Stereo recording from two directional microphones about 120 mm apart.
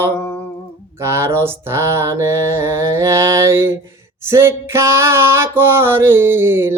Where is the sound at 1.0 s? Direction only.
25° right (ahead or behind).